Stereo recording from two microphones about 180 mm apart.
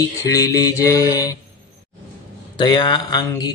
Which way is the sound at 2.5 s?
25° left (ahead or behind).